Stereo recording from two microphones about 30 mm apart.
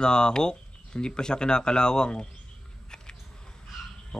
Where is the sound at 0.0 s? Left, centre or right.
Left.